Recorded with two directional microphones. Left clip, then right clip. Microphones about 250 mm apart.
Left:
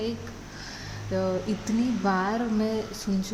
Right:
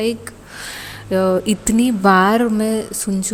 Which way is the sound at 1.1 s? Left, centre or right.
Right.